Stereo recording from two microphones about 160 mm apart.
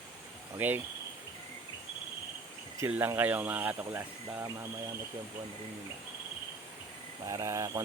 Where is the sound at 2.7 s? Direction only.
15° right (ahead or behind).